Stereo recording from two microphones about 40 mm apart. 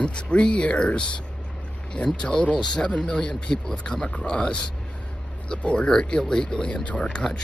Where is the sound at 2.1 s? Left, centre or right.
Left.